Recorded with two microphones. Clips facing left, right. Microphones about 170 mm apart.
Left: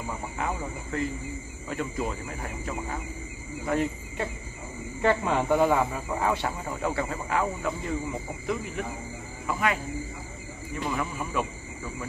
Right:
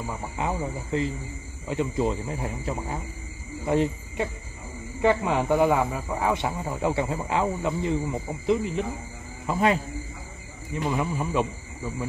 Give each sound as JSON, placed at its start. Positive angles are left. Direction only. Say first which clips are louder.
{"t": 0.4, "sound": "speech", "louder": "right 4 dB", "side_deg": -20}
{"t": 5.0, "sound": "a man's voice", "louder": "right 2 dB", "side_deg": -15}
{"t": 10.7, "sound": "speech", "louder": "right 4 dB", "side_deg": -15}